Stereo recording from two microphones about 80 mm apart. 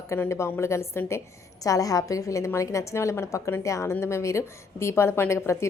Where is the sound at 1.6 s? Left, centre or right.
Left.